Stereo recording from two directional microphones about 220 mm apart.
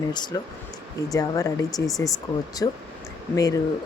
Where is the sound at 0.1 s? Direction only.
20° left (ahead or behind).